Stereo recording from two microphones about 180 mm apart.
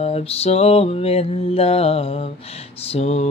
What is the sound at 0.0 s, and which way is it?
Mantra, 35° left (ahead or behind).